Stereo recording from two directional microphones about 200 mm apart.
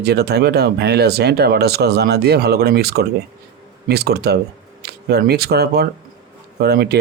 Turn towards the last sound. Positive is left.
turn(degrees=-55)  # may be behind; listen again after turning